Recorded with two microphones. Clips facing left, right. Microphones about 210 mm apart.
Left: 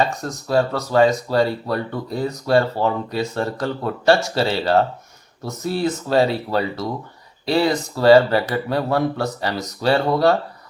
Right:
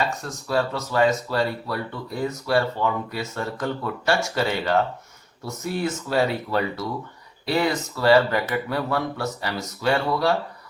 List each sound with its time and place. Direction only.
0.0 s speech: 40° left (ahead or behind)